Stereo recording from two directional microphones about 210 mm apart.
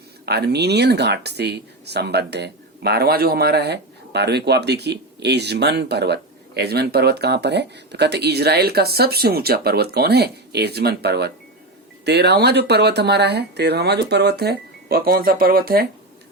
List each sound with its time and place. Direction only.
0.3 s speech: 50° right (ahead or behind)